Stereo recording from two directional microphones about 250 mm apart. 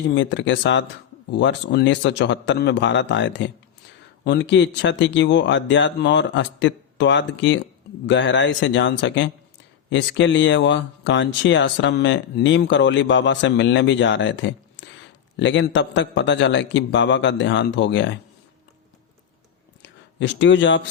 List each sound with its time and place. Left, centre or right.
0.1 s speech: left
19.8 s speech: left